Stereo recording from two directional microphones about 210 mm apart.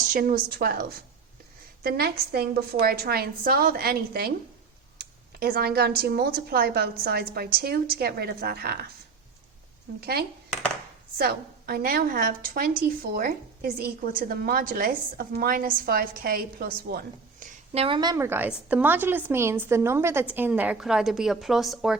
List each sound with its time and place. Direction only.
0.1 s a woman's voice: 40° right (ahead or behind)
5.4 s a woman's voice: 45° right (ahead or behind)
11.2 s a woman's voice: 45° right (ahead or behind)
17.7 s a woman's voice: 25° right (ahead or behind); by 21.9 s centre (ahead or behind)